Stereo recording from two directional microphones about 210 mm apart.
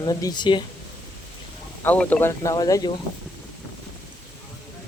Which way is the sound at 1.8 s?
5° left (ahead or behind).